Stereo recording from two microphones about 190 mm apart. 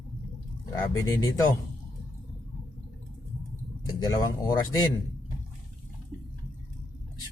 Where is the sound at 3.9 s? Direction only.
20° left (ahead or behind).